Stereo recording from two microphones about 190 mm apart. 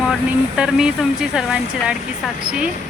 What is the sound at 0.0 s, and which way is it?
Speech, centre (ahead or behind).